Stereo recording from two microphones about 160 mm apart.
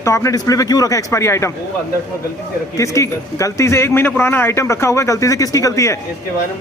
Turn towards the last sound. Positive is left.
turn(degrees=20)  # may be behind; listen again after turning